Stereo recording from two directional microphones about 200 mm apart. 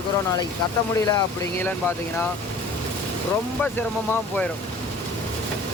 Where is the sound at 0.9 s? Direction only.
15° left (ahead or behind).